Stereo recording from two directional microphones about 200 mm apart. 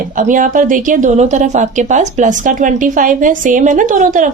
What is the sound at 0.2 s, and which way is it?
A woman's voice, 40° right (ahead or behind).